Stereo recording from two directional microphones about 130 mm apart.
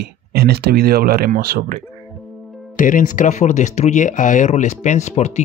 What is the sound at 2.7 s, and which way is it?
Speech, 90° left.